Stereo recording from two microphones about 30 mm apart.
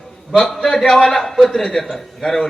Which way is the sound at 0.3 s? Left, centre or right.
Centre.